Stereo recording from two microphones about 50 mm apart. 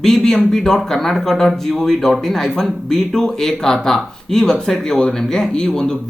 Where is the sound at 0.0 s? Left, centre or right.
Centre.